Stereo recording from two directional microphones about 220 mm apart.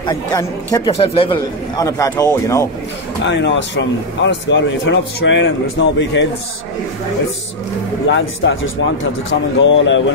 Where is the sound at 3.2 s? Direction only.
55° left (ahead or behind).